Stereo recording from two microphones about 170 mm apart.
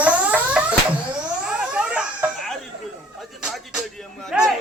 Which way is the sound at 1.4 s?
5° right (ahead or behind).